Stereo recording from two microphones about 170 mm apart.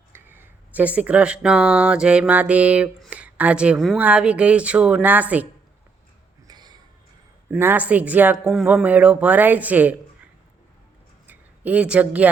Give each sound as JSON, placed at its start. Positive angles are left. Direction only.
{"t": 0.1, "sound": "speech", "side_deg": -10}
{"t": 6.5, "sound": "a sound", "side_deg": -25}
{"t": 7.5, "sound": "speech", "side_deg": -10}
{"t": 11.3, "sound": "speech", "side_deg": -10}